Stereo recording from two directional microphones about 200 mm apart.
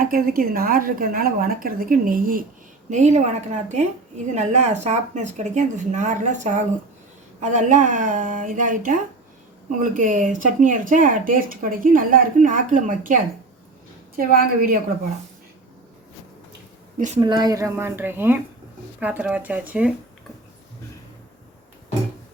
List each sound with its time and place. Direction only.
0.0 s a woman's voice: 45° right (ahead or behind)
14.2 s a woman's voice: 45° right (ahead or behind)
17.2 s speech: 20° right (ahead or behind)